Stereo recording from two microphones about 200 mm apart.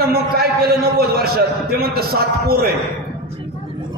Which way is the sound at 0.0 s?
50° right (ahead or behind).